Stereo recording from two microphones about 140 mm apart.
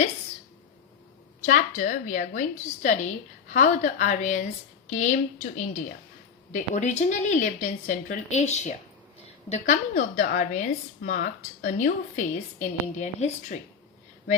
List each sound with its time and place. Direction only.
1.4 s a woman's voice: 60° left (ahead or behind)
10.2 s a woman's voice: 70° left (ahead or behind); by 13.6 s 55° left (ahead or behind)